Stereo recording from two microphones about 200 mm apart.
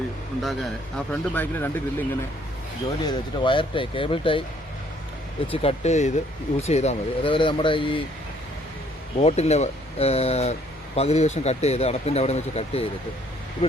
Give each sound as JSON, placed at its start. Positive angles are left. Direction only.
{"t": 0.4, "sound": "speech", "side_deg": 0}
{"t": 3.1, "sound": "speech", "side_deg": 25}
{"t": 5.5, "sound": "speech", "side_deg": 30}
{"t": 9.1, "sound": "speech", "side_deg": 30}